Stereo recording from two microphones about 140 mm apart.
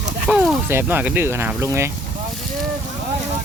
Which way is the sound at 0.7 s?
10° right (ahead or behind).